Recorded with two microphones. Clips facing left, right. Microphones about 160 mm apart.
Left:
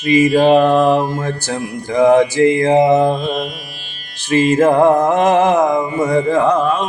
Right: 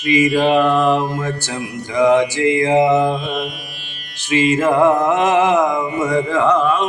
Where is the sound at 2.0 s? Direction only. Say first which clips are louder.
Left 3 dB; 50° left (ahead or behind).